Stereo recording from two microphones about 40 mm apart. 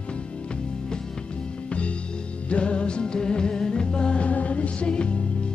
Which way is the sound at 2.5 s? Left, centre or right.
Left.